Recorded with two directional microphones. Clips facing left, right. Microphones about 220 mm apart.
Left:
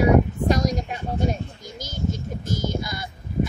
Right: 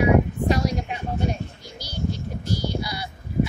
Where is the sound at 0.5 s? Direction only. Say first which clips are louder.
Left 1 dB; 45° left (ahead or behind).